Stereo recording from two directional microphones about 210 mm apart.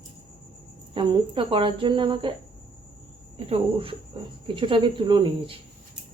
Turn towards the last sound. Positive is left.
turn(degrees=-25)  # may be behind; listen again after turning